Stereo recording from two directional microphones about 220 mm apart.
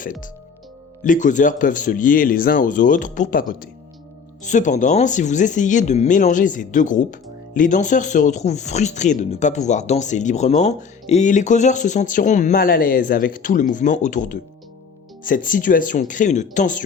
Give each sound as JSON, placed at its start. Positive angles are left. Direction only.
{"t": 0.0, "sound": "speech", "side_deg": 40}